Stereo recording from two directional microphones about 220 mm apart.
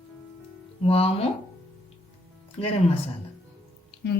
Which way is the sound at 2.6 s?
25° left (ahead or behind).